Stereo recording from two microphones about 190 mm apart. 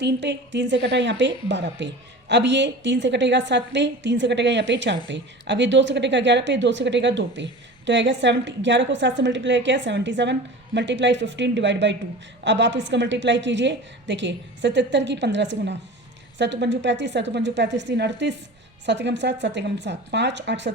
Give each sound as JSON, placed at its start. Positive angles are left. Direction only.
{"t": 0.0, "sound": "a woman's voice", "side_deg": -65}